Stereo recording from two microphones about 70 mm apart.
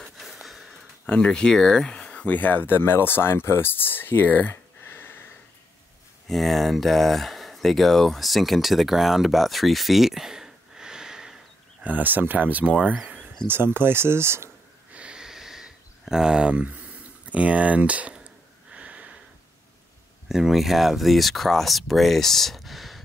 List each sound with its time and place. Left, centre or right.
0.2 s a sound: centre
1.0 s speech: centre
2.2 s speech: left
6.2 s speech: centre
11.8 s speech: right
13.5 s speech: right
14.9 s a sound: centre
17.3 s speech: centre
18.7 s a sound: centre
20.2 s speech: centre